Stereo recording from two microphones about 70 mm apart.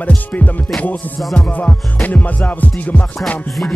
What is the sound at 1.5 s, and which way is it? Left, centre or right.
Music, left.